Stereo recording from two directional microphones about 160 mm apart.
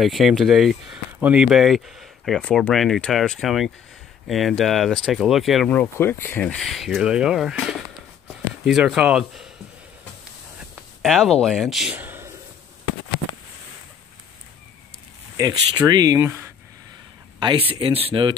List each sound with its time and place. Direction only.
0.0 s speech: centre (ahead or behind)
10.6 s a sound: centre (ahead or behind)
15.3 s speech: 20° right (ahead or behind)
17.4 s speech: 30° right (ahead or behind)